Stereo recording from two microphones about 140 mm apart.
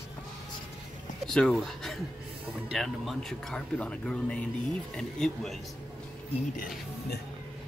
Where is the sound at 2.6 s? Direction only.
Centre (ahead or behind).